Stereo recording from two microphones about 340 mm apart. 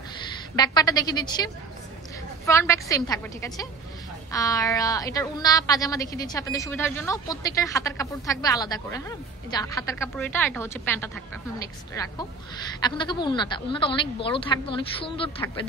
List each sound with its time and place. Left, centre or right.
0.6 s a woman's voice: centre